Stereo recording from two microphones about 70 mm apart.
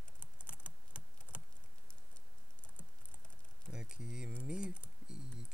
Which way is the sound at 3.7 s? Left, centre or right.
Centre.